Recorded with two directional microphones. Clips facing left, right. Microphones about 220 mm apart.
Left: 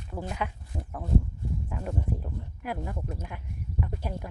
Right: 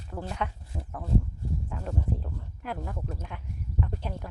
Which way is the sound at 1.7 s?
15° left (ahead or behind).